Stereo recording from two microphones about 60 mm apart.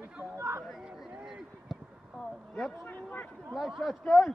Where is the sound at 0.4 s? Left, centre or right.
Right.